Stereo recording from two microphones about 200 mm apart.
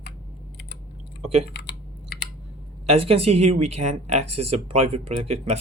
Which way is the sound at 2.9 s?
30° right (ahead or behind).